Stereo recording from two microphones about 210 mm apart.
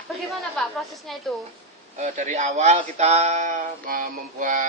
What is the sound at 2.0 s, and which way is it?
A man's voice, 35° right (ahead or behind).